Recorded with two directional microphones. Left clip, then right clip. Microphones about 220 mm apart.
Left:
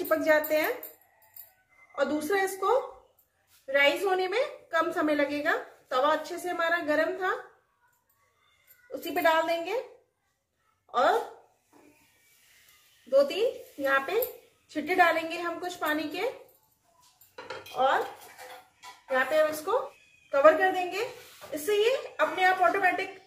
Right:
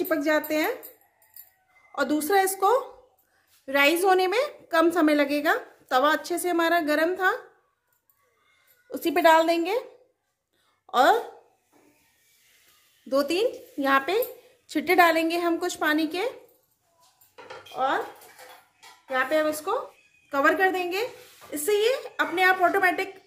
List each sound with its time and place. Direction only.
0.1 s speech: 40° right (ahead or behind)
2.0 s a woman's voice: 50° right (ahead or behind)
9.1 s a woman's voice: 45° right (ahead or behind)
10.9 s speech: 50° right (ahead or behind)
13.1 s a woman's voice: 50° right (ahead or behind)
17.8 s speech: 35° right (ahead or behind)
19.1 s a woman's voice: 40° right (ahead or behind)